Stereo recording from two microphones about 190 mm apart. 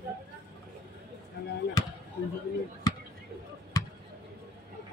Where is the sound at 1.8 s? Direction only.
20° left (ahead or behind).